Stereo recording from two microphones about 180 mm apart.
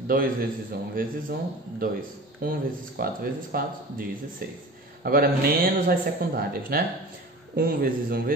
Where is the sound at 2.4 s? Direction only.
55° right (ahead or behind).